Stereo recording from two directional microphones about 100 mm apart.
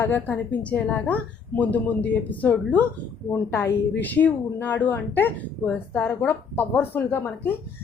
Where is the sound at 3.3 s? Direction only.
25° left (ahead or behind).